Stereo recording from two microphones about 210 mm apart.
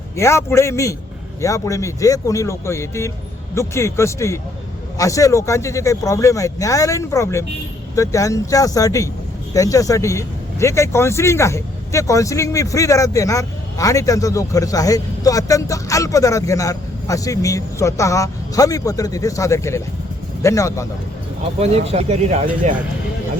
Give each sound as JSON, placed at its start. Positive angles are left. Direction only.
{"t": 0.2, "sound": "speech", "side_deg": 15}
{"t": 21.6, "sound": "speech", "side_deg": -30}